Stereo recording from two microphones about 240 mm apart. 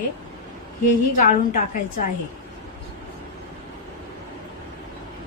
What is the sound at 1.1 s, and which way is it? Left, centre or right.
Speech, left.